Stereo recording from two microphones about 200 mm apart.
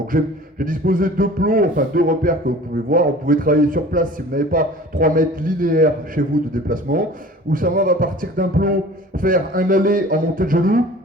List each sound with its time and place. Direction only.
0.1 s a man's voice: 40° right (ahead or behind)